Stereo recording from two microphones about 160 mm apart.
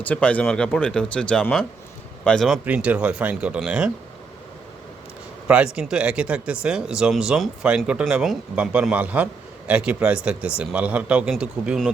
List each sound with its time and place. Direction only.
0.0 s speech: 10° left (ahead or behind)
2.6 s speech: 10° right (ahead or behind)
5.5 s speech: 5° right (ahead or behind)